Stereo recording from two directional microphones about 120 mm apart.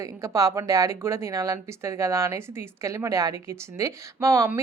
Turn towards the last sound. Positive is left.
turn(degrees=-25)  # may be behind; listen again after turning